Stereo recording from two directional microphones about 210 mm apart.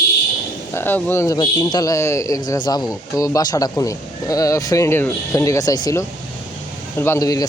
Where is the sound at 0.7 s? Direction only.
10° left (ahead or behind).